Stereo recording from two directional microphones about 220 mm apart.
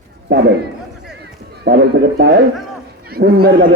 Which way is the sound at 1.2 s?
50° right (ahead or behind).